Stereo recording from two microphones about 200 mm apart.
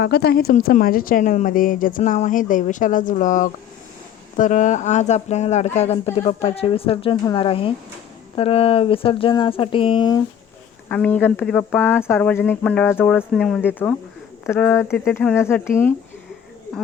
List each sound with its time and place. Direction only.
0.0 s a woman's voice: 55° left (ahead or behind); by 10.2 s 25° left (ahead or behind)
10.8 s speech: 5° left (ahead or behind)